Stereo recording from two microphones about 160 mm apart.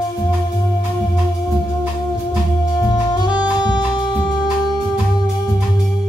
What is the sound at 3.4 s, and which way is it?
Jazz, 25° left (ahead or behind).